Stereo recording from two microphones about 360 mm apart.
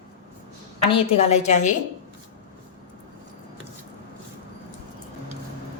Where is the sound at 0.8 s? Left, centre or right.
Centre.